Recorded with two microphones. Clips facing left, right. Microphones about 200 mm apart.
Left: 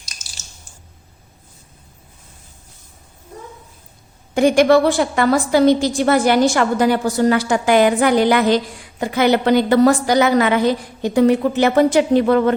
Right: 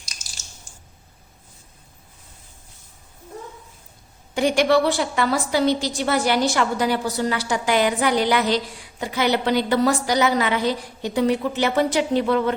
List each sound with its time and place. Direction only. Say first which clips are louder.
4.4 s a woman's voice: left 6 dB; 50° left (ahead or behind)